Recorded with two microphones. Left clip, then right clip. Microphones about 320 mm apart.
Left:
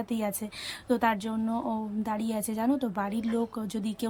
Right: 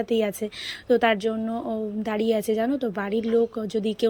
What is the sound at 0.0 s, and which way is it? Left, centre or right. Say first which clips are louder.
Speech: right 9 dB; centre.